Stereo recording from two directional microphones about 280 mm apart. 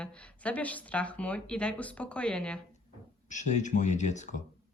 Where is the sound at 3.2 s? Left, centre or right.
Left.